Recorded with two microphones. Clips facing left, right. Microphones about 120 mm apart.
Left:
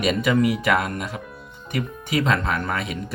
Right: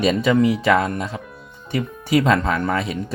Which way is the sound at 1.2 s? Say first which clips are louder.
Even; centre (ahead or behind).